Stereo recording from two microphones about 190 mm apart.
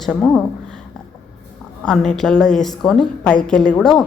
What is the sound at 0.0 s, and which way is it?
Speech, 5° left (ahead or behind).